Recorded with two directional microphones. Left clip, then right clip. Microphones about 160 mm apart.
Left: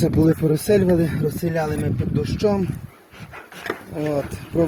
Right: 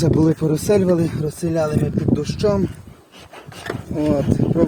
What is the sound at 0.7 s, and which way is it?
Speech, 90° right.